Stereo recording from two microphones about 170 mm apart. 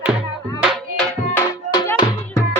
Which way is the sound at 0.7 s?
5° left (ahead or behind).